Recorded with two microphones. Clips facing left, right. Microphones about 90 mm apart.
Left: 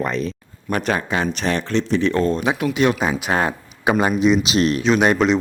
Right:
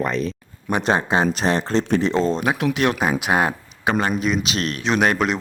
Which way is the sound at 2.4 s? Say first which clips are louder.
Left 1 dB; 5° right (ahead or behind).